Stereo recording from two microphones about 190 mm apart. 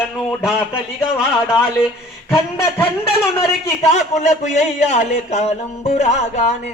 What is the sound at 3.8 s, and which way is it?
A man's voice, 40° left (ahead or behind).